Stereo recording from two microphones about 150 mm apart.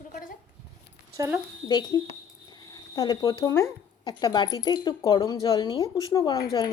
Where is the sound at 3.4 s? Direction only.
20° left (ahead or behind).